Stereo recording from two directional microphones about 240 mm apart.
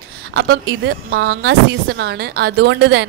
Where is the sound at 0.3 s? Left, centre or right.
Right.